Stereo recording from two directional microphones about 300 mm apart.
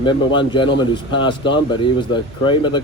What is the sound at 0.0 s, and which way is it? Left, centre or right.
A man's voice, centre.